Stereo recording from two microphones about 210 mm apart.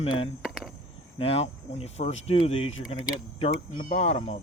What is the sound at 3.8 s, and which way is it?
Speech, 30° left (ahead or behind).